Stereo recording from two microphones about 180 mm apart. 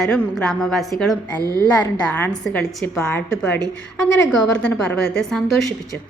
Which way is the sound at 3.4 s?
5° left (ahead or behind).